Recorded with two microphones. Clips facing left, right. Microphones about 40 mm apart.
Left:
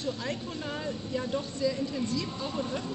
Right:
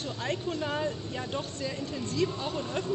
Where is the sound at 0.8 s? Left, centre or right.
Right.